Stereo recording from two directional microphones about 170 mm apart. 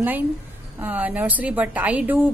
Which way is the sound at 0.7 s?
10° right (ahead or behind).